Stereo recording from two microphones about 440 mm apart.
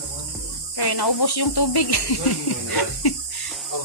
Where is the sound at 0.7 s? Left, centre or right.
Left.